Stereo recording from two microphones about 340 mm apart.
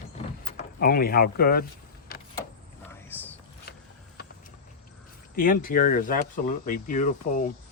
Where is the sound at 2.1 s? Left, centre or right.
Left.